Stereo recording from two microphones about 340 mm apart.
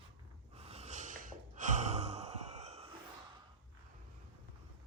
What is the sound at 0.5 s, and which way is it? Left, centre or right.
Gasp, centre.